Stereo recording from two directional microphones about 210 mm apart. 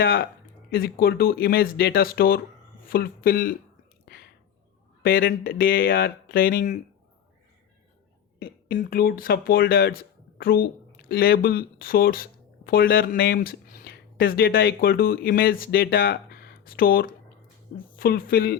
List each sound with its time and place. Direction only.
0.0 s speech: 45° left (ahead or behind)
5.0 s speech: 45° left (ahead or behind)
8.6 s speech: 40° left (ahead or behind)